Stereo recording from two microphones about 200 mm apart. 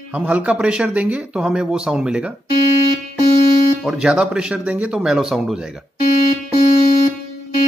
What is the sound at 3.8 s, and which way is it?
Speech, 5° right (ahead or behind).